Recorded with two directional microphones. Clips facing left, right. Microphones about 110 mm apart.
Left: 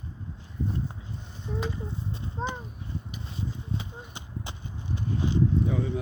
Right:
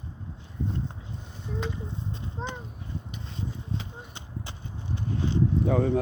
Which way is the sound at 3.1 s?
5° left (ahead or behind).